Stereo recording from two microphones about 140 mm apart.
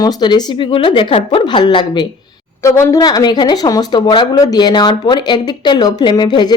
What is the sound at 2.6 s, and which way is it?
Speech, 20° left (ahead or behind).